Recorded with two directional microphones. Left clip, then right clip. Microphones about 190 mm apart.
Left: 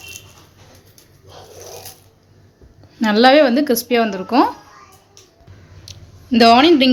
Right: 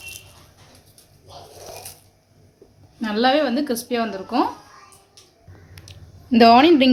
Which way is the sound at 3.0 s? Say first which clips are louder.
Left 8 dB; 35° left (ahead or behind).